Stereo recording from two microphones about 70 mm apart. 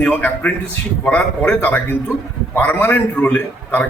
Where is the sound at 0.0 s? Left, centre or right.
Left.